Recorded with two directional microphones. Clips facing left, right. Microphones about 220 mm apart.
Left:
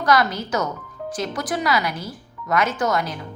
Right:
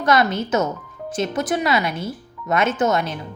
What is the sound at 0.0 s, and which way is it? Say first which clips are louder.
Speech: right 2 dB; 25° right (ahead or behind).